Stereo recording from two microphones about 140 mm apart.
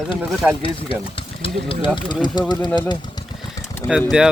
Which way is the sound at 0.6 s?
40° left (ahead or behind).